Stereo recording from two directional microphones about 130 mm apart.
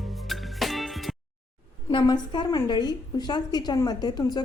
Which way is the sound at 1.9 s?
35° left (ahead or behind).